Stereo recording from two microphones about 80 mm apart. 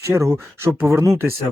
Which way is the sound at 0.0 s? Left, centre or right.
Right.